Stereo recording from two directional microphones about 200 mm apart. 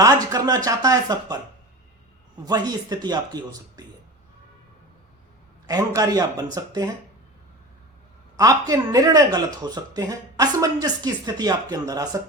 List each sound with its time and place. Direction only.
0.0 s speech: 20° right (ahead or behind)
2.4 s speech: 20° right (ahead or behind)
5.6 s speech: 20° right (ahead or behind)
8.4 s speech: 20° right (ahead or behind)